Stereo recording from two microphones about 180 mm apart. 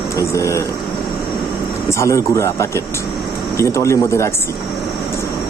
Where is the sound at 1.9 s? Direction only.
15° left (ahead or behind).